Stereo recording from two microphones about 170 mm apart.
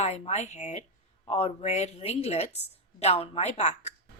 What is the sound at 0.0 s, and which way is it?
A woman's voice, 40° left (ahead or behind).